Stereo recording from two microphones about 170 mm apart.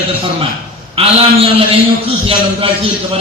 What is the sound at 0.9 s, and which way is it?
A man's voice, 30° right (ahead or behind).